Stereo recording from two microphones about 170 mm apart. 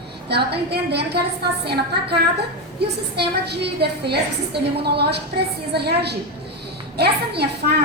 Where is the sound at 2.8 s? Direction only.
75° right (ahead or behind).